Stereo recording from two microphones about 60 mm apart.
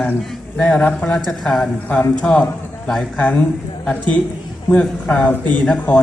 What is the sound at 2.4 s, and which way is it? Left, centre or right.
Speech, centre.